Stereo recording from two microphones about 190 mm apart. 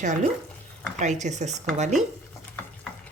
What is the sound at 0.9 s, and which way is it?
Speech, 40° right (ahead or behind).